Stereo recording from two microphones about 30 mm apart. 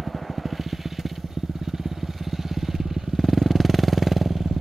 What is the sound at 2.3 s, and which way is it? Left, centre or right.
Vehicle, centre.